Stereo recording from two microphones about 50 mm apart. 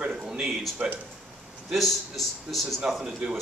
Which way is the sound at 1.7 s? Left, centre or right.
Centre.